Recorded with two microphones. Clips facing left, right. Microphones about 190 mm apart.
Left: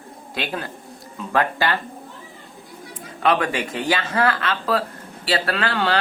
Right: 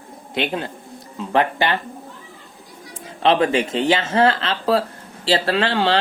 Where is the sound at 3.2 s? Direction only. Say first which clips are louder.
Right 4 dB; 25° right (ahead or behind).